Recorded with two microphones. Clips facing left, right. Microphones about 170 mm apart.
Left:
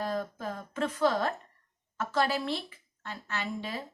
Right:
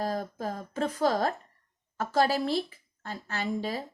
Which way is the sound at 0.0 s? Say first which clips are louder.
Right 2 dB; 40° right (ahead or behind).